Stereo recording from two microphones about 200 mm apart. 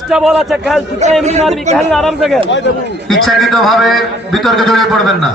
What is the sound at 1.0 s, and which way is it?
Speech, 35° right (ahead or behind).